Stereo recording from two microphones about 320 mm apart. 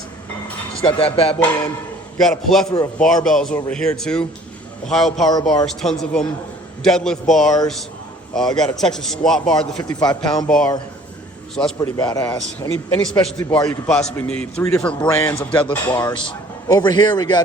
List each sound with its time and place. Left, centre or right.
0.8 s speech: centre
2.2 s a man's voice: centre
9.9 s speech: centre
10.2 s a man's voice: centre
11.9 s a man's voice: centre